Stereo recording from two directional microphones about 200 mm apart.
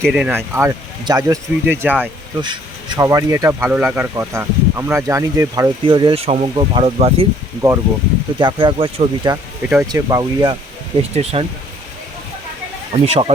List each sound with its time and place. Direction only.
0.0 s speech: 5° right (ahead or behind)
2.4 s speech: 20° right (ahead or behind)
7.6 s speech: 15° right (ahead or behind)
11.1 s speech: 30° right (ahead or behind)
12.9 s speech: 30° right (ahead or behind)